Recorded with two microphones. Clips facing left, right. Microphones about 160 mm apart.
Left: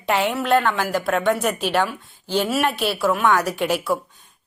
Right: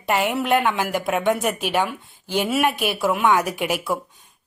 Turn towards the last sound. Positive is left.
turn(degrees=-10)  # may be behind; listen again after turning